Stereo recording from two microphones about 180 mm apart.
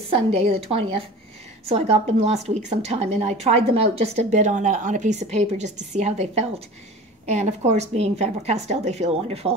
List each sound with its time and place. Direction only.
0.1 s a woman's voice: 35° right (ahead or behind)